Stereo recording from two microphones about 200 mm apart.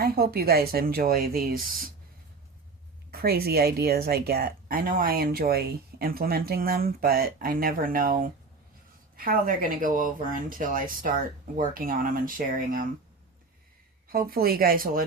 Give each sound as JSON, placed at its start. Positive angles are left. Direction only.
{"t": 0.0, "sound": "speech", "side_deg": -50}
{"t": 3.1, "sound": "speech", "side_deg": -50}
{"t": 14.1, "sound": "speech", "side_deg": -50}